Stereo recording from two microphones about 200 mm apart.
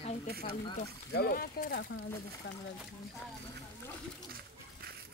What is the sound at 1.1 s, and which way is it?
Speech, 45° left (ahead or behind).